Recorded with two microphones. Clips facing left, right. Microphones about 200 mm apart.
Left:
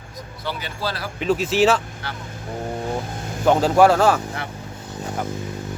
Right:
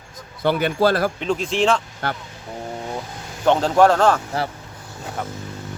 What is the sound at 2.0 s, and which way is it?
Speech, 55° right (ahead or behind).